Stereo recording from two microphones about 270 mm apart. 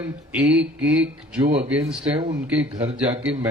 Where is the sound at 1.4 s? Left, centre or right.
Right.